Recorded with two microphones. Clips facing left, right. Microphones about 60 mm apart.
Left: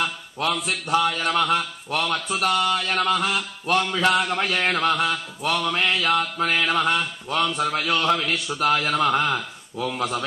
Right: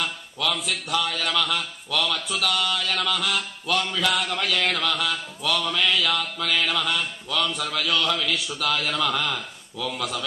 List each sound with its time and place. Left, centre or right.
0.5 s speech: centre
0.8 s mantra: left